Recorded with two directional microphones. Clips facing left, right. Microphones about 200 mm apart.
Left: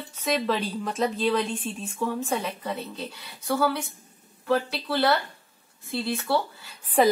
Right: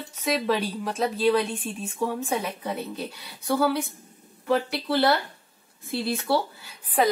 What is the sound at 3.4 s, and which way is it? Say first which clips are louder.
A woman's voice: right 2 dB; 15° right (ahead or behind).